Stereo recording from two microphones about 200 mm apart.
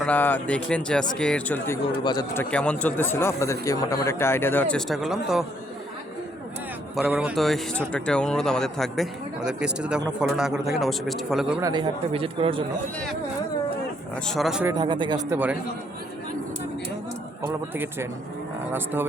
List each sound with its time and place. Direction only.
0.0 s speech: 5° left (ahead or behind)
2.4 s speech: 5° left (ahead or behind)
6.9 s speech: 5° right (ahead or behind)
11.6 s speech: 20° right (ahead or behind)
14.3 s speech: centre (ahead or behind)
14.7 s speech: 20° right (ahead or behind)
15.3 s a man's voice: 10° right (ahead or behind)